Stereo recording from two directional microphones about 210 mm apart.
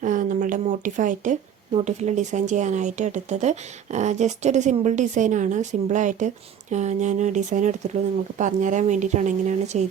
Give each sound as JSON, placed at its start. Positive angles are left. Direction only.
{"t": 0.0, "sound": "speech", "side_deg": -40}